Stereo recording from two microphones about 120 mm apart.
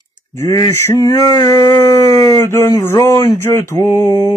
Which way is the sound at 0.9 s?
30° left (ahead or behind).